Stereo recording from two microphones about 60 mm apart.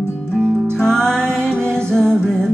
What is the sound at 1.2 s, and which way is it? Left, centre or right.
Music, right.